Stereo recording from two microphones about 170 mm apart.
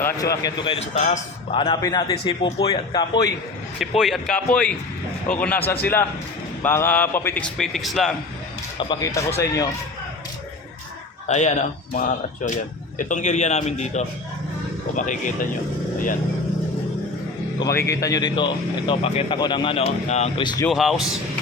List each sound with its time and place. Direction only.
0.0 s speech: 20° left (ahead or behind)
0.9 s a man's voice: 40° left (ahead or behind)
1.5 s speech: 30° left (ahead or behind)
3.8 s speech: centre (ahead or behind)
8.8 s speech: 25° left (ahead or behind)
11.3 s speech: 45° left (ahead or behind)
17.8 s speech: 20° left (ahead or behind); by 20.4 s 40° left (ahead or behind)
20.4 s speech: 25° left (ahead or behind)
20.7 s speech: centre (ahead or behind)